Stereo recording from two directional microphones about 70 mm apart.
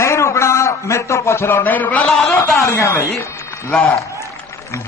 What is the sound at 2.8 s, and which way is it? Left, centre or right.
Speech, left.